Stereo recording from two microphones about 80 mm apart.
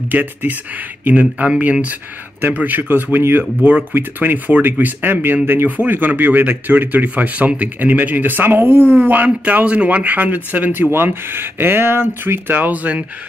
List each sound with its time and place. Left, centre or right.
0.1 s speech: right